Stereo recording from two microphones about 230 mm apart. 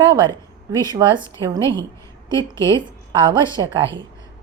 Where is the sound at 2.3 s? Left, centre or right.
Centre.